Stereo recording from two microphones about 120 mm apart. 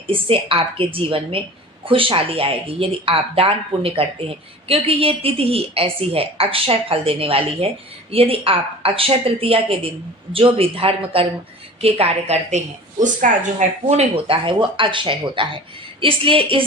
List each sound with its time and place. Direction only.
0.1 s a woman's voice: 50° right (ahead or behind); by 13.3 s 80° right
13.8 s a woman's voice: 70° right (ahead or behind)
14.3 s a woman's voice: 45° right (ahead or behind)